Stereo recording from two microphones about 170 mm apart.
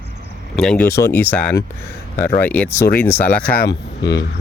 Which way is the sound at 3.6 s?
85° left.